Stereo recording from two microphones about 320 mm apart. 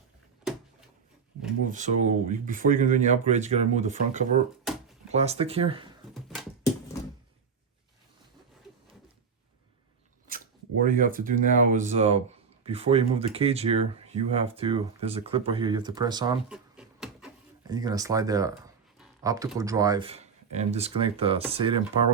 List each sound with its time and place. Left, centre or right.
1.6 s speech: right
6.1 s a sound: centre
10.2 s speech: right
16.5 s beatboxing: centre
17.7 s speech: centre